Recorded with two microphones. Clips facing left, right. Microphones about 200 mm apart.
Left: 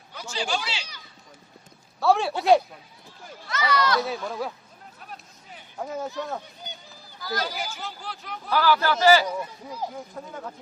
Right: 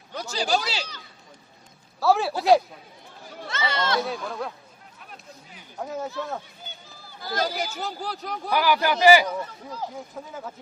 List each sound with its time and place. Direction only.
0.1 s a sound: 40° right (ahead or behind)
2.0 s a sound: centre (ahead or behind)
3.4 s speech: 25° right (ahead or behind)
4.0 s speech: centre (ahead or behind)
4.9 s a sound: 40° left (ahead or behind)
5.7 s speech: centre (ahead or behind)
7.2 s speech: 25° right (ahead or behind)
7.4 s speech: 40° right (ahead or behind)
8.4 s a man's voice: 15° right (ahead or behind)
9.2 s speech: 10° left (ahead or behind)
9.9 s speech: centre (ahead or behind)